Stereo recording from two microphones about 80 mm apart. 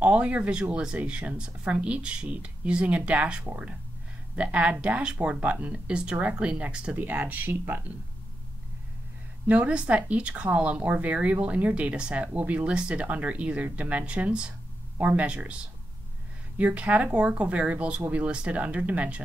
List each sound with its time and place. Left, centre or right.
0.0 s a woman's voice: centre
9.5 s a woman's voice: centre
16.5 s a woman's voice: centre